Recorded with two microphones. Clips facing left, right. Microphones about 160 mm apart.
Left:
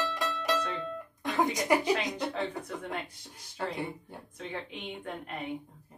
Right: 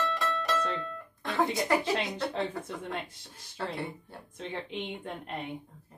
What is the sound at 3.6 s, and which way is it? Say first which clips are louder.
Speech: left 1 dB; 15° left (ahead or behind).